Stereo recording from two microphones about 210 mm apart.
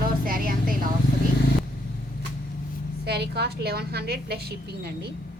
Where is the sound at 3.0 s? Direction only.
50° right (ahead or behind).